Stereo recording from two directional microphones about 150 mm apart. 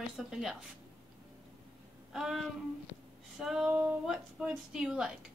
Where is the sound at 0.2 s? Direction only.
5° right (ahead or behind).